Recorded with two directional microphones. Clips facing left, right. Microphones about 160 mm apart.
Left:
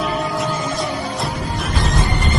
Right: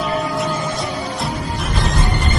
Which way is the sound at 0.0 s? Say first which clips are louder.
Right 1 dB; centre (ahead or behind).